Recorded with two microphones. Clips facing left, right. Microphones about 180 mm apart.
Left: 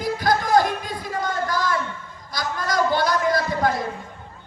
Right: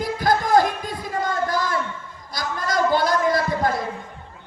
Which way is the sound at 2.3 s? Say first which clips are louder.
Even; 50° right (ahead or behind).